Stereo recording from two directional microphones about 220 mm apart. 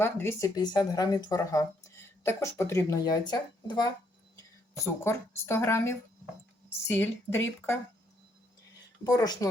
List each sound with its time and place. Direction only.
0.0 s speech: 10° left (ahead or behind)
5.0 s speech: 10° left (ahead or behind)
9.0 s speech: 15° left (ahead or behind)